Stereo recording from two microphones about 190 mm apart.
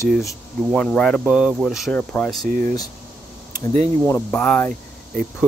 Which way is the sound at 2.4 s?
45° right (ahead or behind).